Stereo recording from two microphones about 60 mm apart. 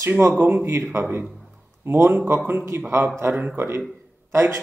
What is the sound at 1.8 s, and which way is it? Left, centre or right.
Speech, right.